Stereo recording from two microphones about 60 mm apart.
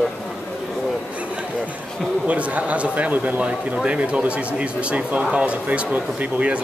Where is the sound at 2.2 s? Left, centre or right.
Right.